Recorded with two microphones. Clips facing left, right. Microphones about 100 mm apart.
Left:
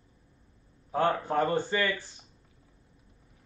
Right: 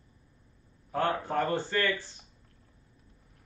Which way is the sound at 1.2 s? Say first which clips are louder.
Left 2 dB; 15° left (ahead or behind).